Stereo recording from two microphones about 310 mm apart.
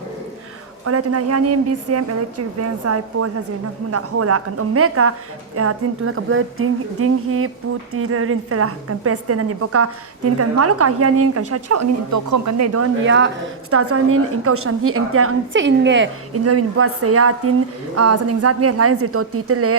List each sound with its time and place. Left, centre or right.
0.9 s a woman's voice: right